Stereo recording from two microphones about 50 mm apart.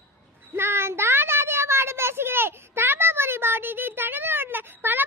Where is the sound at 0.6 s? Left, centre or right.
Right.